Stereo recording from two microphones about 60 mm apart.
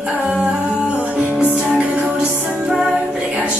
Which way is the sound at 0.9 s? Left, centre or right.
Centre.